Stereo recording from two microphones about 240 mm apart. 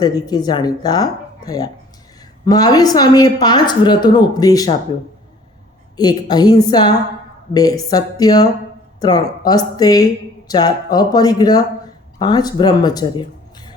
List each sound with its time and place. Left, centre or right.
0.3 s speech: centre
6.0 s speech: centre